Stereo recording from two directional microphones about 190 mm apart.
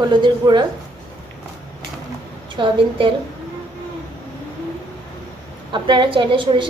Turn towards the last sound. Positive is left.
turn(degrees=-25)  # may be behind; listen again after turning